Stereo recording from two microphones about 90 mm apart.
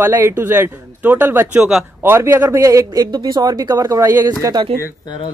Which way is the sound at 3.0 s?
55° right (ahead or behind).